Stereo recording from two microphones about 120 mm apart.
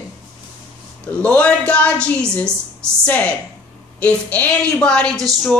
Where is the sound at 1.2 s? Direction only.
10° left (ahead or behind).